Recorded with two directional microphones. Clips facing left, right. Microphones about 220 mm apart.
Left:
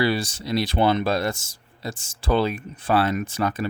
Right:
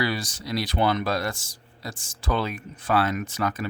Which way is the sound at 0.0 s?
30° left (ahead or behind).